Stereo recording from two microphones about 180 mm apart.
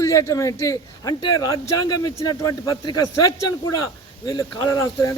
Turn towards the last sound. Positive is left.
turn(degrees=20)  # may be behind; listen again after turning